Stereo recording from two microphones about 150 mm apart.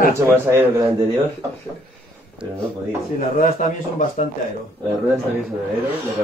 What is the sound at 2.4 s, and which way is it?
Speech, 5° right (ahead or behind).